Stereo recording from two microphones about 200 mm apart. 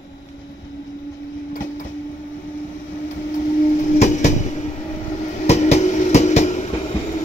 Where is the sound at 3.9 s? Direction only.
35° left (ahead or behind).